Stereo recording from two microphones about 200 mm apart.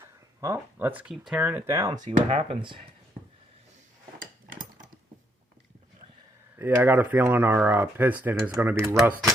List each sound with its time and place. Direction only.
0.0 s speech: 15° right (ahead or behind)
2.0 s speech: 30° right (ahead or behind)
6.6 s speech: 10° right (ahead or behind)